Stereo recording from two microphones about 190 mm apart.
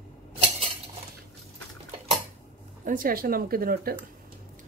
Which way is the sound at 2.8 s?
45° right (ahead or behind).